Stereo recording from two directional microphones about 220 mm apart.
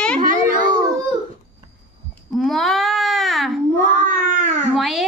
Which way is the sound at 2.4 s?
Centre (ahead or behind).